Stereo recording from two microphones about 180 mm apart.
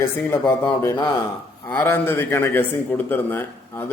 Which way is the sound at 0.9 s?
25° left (ahead or behind).